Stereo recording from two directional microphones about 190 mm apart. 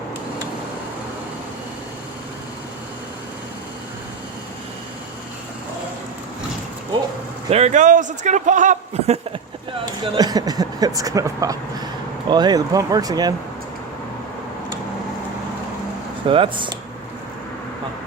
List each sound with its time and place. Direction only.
7.5 s a man's voice: 35° right (ahead or behind)
10.2 s speech: 20° right (ahead or behind)
16.2 s speech: 25° right (ahead or behind)